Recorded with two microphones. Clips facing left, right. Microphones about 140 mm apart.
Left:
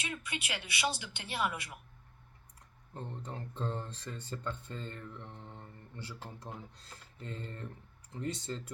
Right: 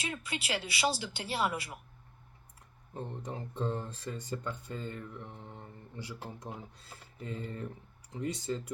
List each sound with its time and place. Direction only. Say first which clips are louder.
0.0 s speech: right 3 dB; 30° right (ahead or behind)
2.9 s speech: right 3 dB; 10° right (ahead or behind)